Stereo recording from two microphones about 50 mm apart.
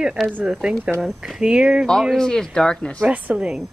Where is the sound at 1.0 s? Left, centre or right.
Centre.